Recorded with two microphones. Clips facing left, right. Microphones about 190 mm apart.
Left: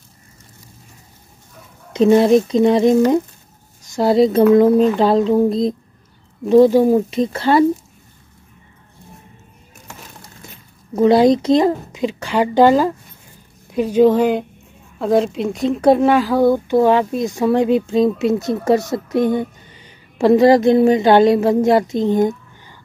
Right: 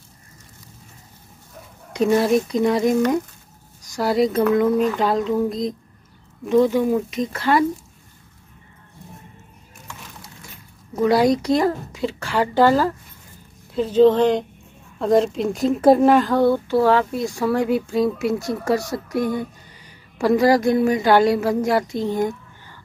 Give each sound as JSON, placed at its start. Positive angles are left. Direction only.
{"t": 1.9, "sound": "speech", "side_deg": 25}
{"t": 11.0, "sound": "speech", "side_deg": 25}